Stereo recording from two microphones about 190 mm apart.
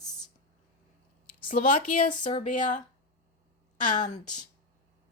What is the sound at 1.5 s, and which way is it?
Speech, 45° left (ahead or behind).